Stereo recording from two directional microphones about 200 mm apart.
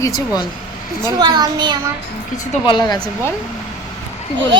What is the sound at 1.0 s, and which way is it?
Speech, 15° right (ahead or behind).